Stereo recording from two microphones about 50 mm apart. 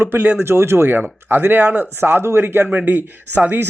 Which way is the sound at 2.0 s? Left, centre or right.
Right.